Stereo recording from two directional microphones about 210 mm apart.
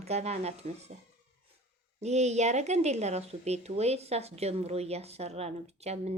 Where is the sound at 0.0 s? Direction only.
30° right (ahead or behind).